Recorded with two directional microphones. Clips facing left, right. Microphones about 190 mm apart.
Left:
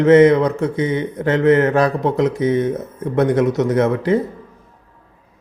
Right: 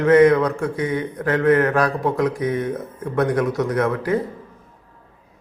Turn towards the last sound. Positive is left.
turn(degrees=25)  # may be behind; listen again after turning